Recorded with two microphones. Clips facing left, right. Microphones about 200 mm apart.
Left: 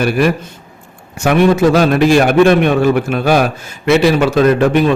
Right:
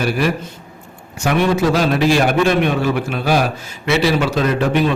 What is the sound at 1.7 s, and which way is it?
A man's voice, 55° left (ahead or behind).